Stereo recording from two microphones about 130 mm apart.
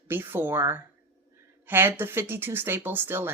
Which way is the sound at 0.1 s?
20° right (ahead or behind).